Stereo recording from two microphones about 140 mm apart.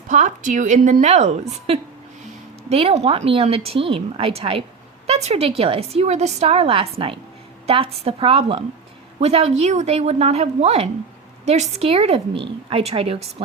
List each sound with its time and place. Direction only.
0.1 s a woman's voice: 60° right (ahead or behind); by 13.1 s 45° right (ahead or behind)